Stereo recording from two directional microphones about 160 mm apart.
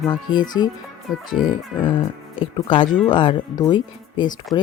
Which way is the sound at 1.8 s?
30° left (ahead or behind).